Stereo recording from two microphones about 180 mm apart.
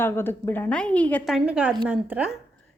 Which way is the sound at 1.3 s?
5° right (ahead or behind).